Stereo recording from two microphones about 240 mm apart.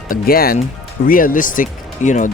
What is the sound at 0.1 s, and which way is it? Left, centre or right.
Speech, left.